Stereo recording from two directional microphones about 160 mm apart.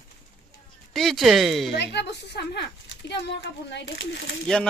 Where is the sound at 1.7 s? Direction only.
90° left.